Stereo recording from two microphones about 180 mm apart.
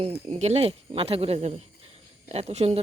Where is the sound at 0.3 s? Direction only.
35° right (ahead or behind).